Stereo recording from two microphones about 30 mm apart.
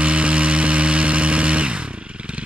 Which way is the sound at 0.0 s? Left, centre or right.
Right.